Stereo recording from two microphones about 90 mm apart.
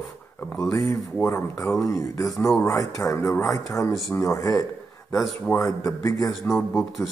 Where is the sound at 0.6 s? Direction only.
35° left (ahead or behind).